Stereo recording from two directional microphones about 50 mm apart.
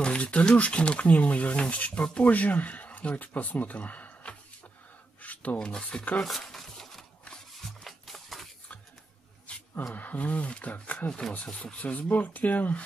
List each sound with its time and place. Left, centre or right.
0.0 s speech: left
5.2 s filing: left
5.6 s speech: centre
6.2 s a sound: centre
9.5 s a sound: left
9.9 s speech: left